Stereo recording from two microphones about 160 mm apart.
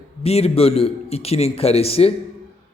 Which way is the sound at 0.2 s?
40° left (ahead or behind).